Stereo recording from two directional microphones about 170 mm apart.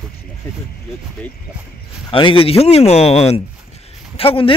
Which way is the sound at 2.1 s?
30° left (ahead or behind).